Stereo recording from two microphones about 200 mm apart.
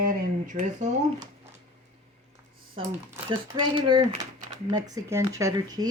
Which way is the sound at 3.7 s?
25° right (ahead or behind).